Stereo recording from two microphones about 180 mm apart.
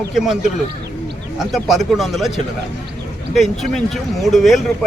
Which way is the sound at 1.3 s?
Centre (ahead or behind).